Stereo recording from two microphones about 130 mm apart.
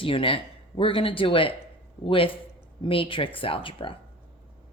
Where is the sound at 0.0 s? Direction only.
45° left (ahead or behind).